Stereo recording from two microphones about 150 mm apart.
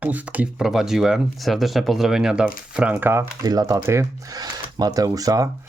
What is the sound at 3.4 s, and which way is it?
Speech, 25° right (ahead or behind).